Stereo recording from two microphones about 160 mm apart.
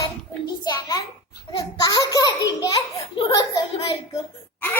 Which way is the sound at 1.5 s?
25° left (ahead or behind).